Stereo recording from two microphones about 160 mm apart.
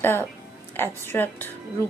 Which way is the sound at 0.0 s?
15° left (ahead or behind).